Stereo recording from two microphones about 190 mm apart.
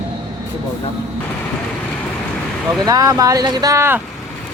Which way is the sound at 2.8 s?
20° right (ahead or behind).